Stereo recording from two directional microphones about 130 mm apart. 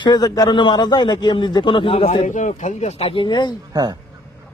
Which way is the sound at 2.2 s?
70° left (ahead or behind).